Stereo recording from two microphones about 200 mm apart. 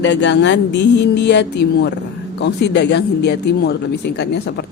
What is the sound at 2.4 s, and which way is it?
A man's voice, 60° left (ahead or behind).